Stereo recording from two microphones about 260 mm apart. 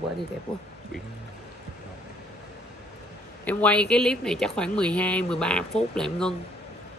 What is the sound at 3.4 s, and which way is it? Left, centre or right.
Speech, centre.